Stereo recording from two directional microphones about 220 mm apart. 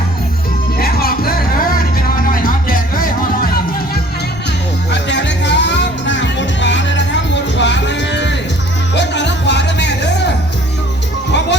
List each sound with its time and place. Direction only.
0.8 s music: 45° left (ahead or behind)
4.9 s music: 55° left (ahead or behind)